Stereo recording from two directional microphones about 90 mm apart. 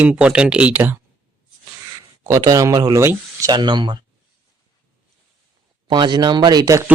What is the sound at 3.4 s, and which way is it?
Speech, 55° right (ahead or behind).